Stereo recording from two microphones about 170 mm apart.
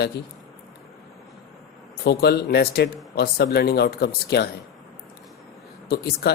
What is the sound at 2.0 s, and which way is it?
Speech, 70° left (ahead or behind).